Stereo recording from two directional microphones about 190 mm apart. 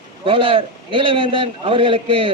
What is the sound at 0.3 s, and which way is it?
A man's voice, 25° right (ahead or behind).